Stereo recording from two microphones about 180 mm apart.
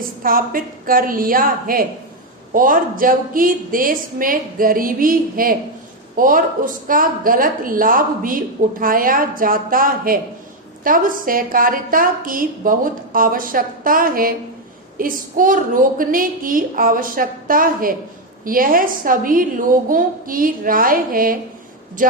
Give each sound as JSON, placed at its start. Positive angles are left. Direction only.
{"t": 0.2, "sound": "a woman's voice", "side_deg": -50}